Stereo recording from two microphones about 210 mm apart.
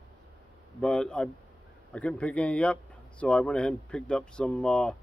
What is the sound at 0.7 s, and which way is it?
A man's voice, 5° left (ahead or behind).